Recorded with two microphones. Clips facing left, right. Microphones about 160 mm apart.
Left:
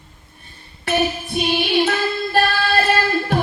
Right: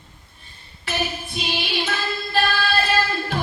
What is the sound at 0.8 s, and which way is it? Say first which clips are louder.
Female singing: left 7 dB; 55° left (ahead or behind).